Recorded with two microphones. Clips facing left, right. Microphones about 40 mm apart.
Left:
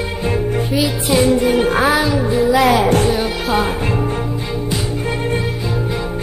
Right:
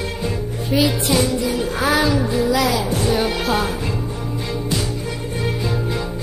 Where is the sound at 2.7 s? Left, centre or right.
Left.